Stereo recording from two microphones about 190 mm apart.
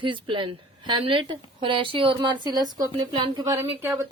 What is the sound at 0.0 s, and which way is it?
Speech, 25° right (ahead or behind).